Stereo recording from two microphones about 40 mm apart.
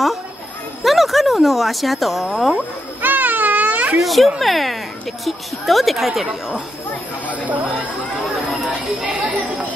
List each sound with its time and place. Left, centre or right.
0.8 s a sound: centre
2.5 s baby cry: right
4.0 s a woman's voice: centre
7.4 s speech: right